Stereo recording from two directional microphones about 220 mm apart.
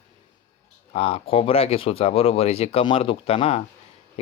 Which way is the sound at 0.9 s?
25° left (ahead or behind).